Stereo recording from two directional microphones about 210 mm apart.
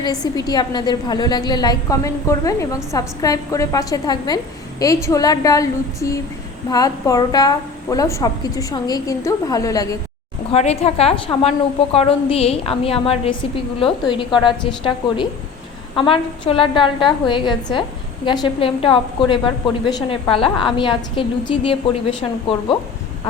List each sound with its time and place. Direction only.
0.0 s a woman's voice: 20° left (ahead or behind)
10.5 s a woman's voice: 30° left (ahead or behind)